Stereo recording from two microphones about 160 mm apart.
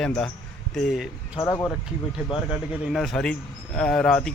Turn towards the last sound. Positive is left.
turn(degrees=5)  # may be behind; listen again after turning